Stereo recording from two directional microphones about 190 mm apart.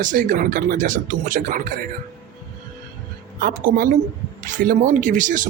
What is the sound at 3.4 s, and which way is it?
Speech, 45° right (ahead or behind).